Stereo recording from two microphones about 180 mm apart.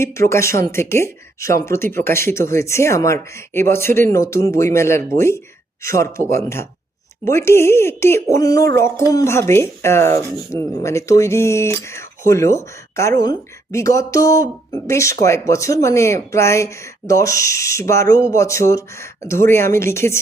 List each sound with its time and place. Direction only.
0.0 s speech: 15° left (ahead or behind)